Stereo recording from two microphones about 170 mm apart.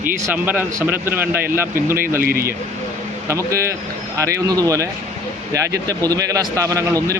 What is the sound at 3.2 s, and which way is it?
A man's voice, 15° right (ahead or behind).